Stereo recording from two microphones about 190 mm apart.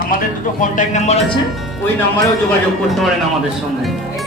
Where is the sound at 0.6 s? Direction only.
40° left (ahead or behind).